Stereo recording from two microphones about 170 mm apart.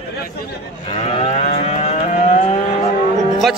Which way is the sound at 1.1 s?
40° left (ahead or behind).